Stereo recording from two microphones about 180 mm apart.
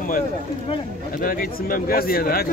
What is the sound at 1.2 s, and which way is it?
Speech, 55° left (ahead or behind).